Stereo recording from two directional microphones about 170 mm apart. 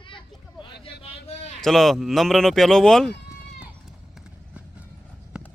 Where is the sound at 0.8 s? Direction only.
40° left (ahead or behind).